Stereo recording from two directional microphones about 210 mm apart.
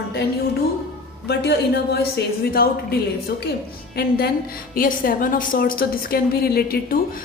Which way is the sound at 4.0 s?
50° left (ahead or behind).